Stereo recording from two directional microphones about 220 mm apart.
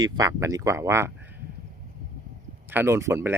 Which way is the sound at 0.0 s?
15° right (ahead or behind).